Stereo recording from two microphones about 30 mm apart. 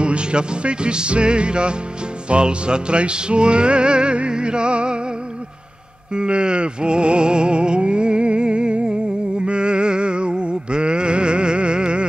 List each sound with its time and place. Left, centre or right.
0.0 s music: right
6.1 s music: right